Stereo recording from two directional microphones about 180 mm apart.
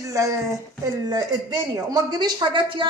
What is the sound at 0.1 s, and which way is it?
A woman's voice, 20° right (ahead or behind).